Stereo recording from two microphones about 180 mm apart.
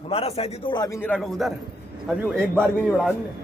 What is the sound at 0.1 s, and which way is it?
A man's voice, 35° left (ahead or behind).